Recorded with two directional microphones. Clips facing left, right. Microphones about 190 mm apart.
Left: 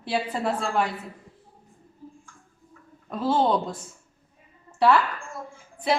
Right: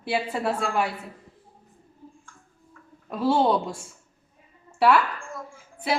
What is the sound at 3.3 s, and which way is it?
Speech, 10° right (ahead or behind).